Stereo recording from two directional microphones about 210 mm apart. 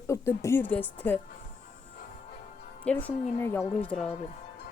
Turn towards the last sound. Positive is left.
turn(degrees=5)  # may be behind; listen again after turning